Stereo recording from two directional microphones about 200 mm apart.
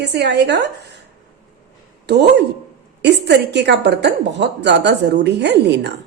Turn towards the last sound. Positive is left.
turn(degrees=-60)  # may be behind; listen again after turning